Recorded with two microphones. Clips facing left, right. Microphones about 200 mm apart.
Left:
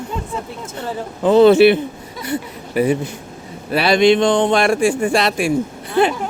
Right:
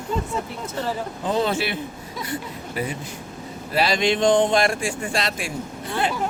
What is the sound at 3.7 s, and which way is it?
Speech, 65° left (ahead or behind).